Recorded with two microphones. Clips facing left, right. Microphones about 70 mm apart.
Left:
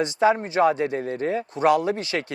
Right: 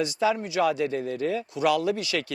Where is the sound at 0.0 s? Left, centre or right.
Left.